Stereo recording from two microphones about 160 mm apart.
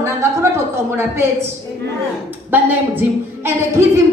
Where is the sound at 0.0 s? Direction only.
15° right (ahead or behind).